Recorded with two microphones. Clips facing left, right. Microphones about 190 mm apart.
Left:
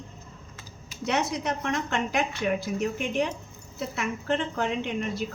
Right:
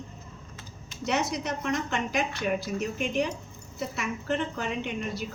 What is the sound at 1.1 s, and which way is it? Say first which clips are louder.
Speech: left 1 dB; 55° left (ahead or behind).